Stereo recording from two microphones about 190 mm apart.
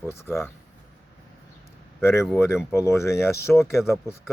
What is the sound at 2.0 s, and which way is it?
Speech, 15° left (ahead or behind).